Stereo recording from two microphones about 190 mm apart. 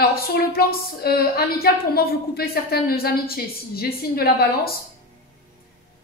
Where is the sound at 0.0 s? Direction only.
50° left (ahead or behind).